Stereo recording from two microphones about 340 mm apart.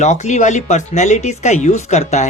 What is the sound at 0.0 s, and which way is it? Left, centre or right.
Speech, left.